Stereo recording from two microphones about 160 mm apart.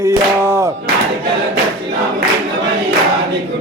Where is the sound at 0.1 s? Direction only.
15° right (ahead or behind).